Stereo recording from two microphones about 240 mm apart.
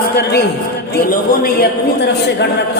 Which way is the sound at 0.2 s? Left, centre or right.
Left.